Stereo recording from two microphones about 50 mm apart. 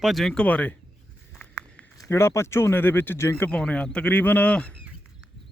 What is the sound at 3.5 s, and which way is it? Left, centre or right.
A man's voice, left.